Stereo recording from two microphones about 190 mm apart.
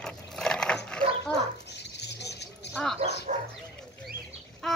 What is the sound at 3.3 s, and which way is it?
Bow-wow, 40° right (ahead or behind).